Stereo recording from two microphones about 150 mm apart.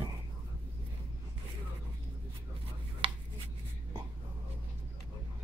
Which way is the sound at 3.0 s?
35° right (ahead or behind).